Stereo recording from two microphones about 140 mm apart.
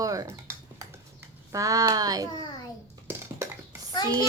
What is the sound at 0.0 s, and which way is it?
Dishes, 25° right (ahead or behind).